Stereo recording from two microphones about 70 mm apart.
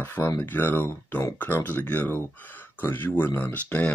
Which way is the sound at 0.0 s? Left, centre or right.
Left.